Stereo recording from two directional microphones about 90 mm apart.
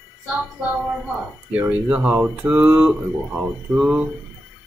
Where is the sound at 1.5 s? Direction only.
15° right (ahead or behind).